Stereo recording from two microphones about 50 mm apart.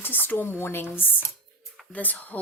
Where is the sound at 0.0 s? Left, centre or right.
Left.